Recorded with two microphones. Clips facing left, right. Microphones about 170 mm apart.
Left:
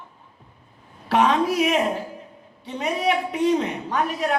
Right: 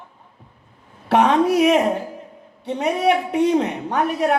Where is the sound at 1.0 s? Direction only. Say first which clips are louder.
Right 4 dB; 60° right (ahead or behind).